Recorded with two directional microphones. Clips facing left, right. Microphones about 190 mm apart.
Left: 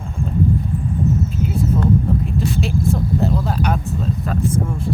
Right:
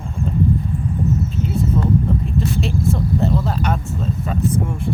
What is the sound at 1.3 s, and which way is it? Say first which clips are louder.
Speech: even; centre (ahead or behind).